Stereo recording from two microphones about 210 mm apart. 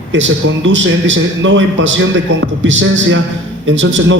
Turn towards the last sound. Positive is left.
turn(degrees=-60)  # may be behind; listen again after turning